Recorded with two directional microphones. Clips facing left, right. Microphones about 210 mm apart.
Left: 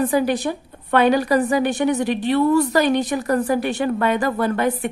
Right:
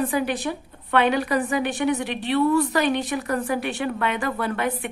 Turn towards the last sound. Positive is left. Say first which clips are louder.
# left 5 dB
turn(degrees=40)  # may be behind; listen again after turning